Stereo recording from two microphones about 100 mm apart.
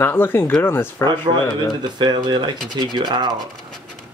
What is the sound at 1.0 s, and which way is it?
Speech, 45° right (ahead or behind).